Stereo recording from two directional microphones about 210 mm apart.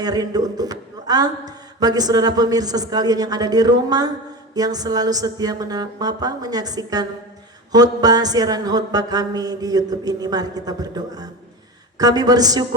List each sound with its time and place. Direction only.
0.0 s a man's voice: 20° right (ahead or behind)